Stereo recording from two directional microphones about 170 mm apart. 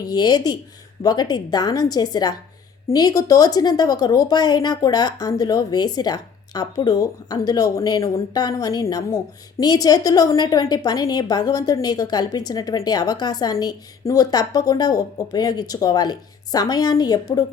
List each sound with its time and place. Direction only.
0.1 s a woman's voice: 25° left (ahead or behind)